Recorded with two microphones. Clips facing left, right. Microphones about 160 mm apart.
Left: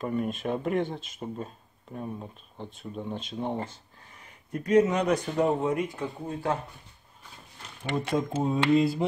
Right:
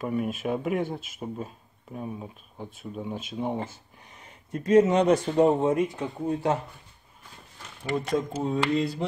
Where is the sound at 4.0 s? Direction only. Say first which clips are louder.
Right 2 dB; 20° right (ahead or behind).